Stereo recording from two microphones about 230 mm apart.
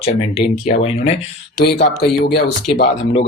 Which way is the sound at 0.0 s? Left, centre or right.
Left.